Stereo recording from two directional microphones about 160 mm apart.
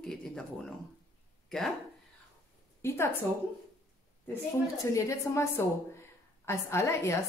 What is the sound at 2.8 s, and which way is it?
Speech, 15° left (ahead or behind).